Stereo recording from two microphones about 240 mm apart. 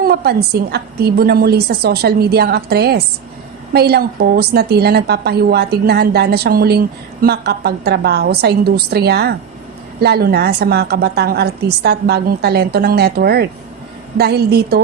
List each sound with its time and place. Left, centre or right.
0.0 s a woman's voice: right